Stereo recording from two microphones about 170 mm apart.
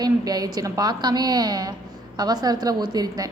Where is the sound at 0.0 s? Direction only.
25° right (ahead or behind).